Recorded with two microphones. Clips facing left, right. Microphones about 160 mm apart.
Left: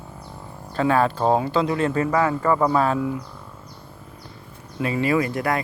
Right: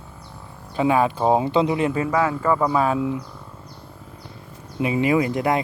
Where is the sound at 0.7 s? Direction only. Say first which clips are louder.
Right 1 dB; 10° right (ahead or behind).